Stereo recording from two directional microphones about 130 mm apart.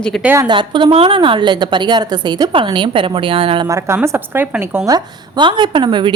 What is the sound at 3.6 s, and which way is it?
A woman's voice, 25° right (ahead or behind).